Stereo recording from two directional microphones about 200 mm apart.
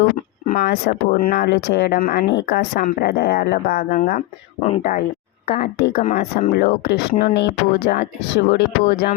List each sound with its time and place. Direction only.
0.4 s speech: 50° left (ahead or behind)
5.9 s speech: 35° left (ahead or behind)
6.5 s speech: 50° left (ahead or behind)